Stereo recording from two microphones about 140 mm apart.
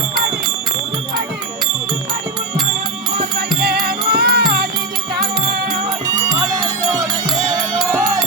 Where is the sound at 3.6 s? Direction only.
90° right.